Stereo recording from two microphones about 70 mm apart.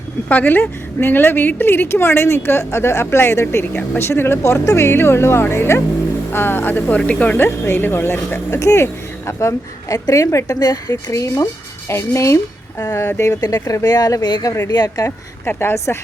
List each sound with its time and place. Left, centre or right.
0.3 s a woman's voice: left
8.5 s a woman's voice: left
10.6 s speech: left
10.9 s a woman's voice: left
13.4 s speech: left
14.7 s speech: left
15.0 s a woman's voice: left